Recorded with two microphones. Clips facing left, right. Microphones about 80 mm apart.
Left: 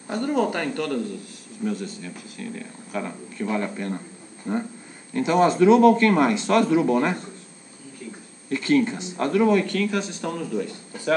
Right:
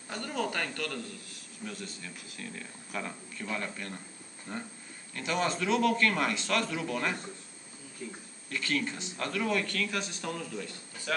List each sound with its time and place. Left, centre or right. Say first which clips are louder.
0.1 s speech: left 11 dB; left
3.1 s speech: left 10 dB; left
8.5 s speech: left 12 dB; left; by 10.4 s centre
10.4 s speech: left 11 dB; left